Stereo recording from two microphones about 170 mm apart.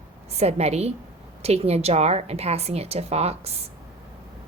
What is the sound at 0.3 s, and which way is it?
Speech, 40° right (ahead or behind).